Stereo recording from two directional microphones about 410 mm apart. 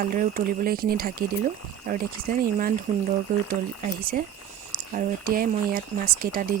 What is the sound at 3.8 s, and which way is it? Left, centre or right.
Speech, right.